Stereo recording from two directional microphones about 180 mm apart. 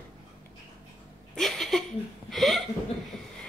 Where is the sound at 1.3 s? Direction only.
Centre (ahead or behind).